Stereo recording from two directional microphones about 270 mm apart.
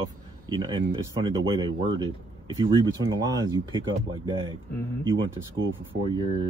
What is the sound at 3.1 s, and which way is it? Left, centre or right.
Speech, centre.